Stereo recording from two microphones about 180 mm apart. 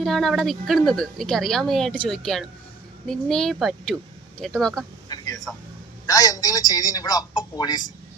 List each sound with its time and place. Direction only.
0.0 s a woman's voice: centre (ahead or behind)
5.0 s a sound: 20° left (ahead or behind)
6.1 s a man's voice: 20° left (ahead or behind)